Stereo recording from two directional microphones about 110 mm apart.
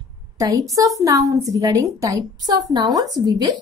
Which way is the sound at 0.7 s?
30° right (ahead or behind).